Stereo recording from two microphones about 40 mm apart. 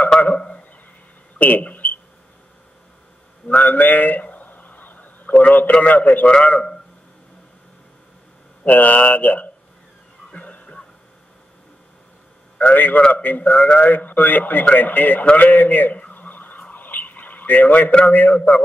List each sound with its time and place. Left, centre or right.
1.4 s speech: left
3.4 s a sound: left
5.7 s a man's voice: left
8.6 s speech: left
10.3 s music: left
12.5 s a man's voice: left
16.1 s a sound: left
18.0 s a man's voice: left